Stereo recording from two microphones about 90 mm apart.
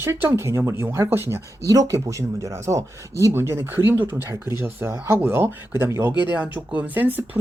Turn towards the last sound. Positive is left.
turn(degrees=-20)  # may be behind; listen again after turning